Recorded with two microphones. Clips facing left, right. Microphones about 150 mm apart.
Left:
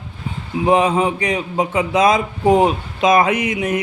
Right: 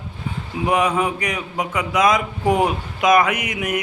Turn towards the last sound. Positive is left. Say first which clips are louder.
# left 5 dB
turn(degrees=30)  # may be behind; listen again after turning